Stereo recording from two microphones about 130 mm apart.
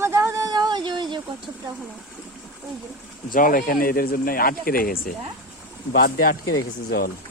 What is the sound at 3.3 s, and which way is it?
Speech, 90° left.